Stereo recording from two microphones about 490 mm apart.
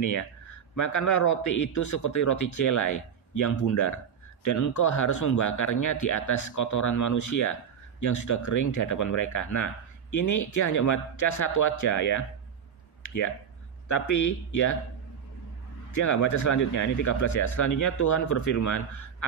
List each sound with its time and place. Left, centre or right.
0.0 s speech: left
13.0 s a sound: left
13.8 s speech: left
15.9 s speech: left